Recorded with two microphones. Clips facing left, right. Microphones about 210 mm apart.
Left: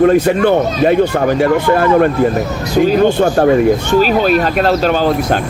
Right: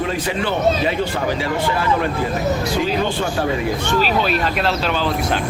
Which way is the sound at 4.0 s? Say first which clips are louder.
Left 7 dB; 45° left (ahead or behind).